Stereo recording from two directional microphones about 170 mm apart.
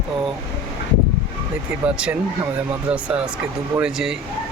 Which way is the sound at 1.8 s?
5° right (ahead or behind).